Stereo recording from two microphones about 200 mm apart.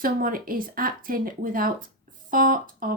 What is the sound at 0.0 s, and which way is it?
A woman's voice, 45° right (ahead or behind).